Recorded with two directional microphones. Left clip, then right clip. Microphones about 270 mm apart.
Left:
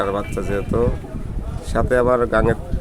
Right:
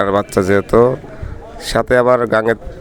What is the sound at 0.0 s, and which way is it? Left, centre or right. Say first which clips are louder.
Speech: right 8 dB; right.